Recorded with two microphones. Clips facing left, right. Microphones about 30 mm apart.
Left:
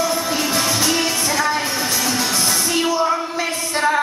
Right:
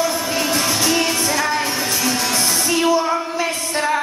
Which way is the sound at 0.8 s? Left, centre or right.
Centre.